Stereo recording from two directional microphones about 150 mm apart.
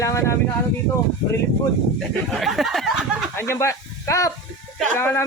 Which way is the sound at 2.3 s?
Centre (ahead or behind).